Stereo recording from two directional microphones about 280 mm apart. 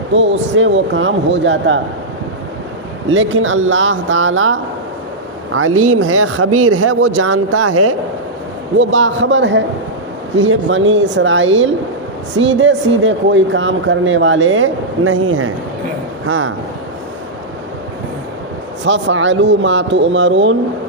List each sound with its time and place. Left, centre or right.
0.1 s speech: right
3.1 s speech: right
8.8 s speech: right
18.9 s speech: right